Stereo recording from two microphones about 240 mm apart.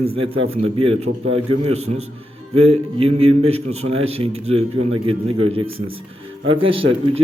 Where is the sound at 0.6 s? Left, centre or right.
Right.